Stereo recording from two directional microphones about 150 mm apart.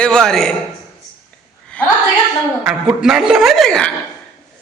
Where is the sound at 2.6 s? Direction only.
5° right (ahead or behind).